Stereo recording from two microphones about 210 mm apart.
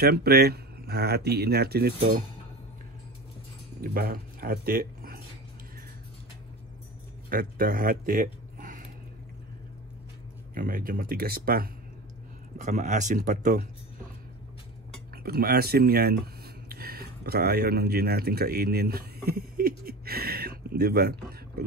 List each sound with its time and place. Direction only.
0.0 s speech: 50° right (ahead or behind)
3.8 s speech: 45° right (ahead or behind)
7.2 s speech: 45° right (ahead or behind)
10.5 s speech: 40° right (ahead or behind)
12.5 s speech: 35° right (ahead or behind)
15.2 s speech: 45° right (ahead or behind)
16.6 s a sound: 45° right (ahead or behind)